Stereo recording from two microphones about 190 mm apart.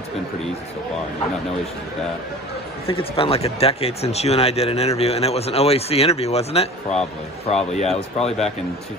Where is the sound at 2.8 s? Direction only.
30° left (ahead or behind).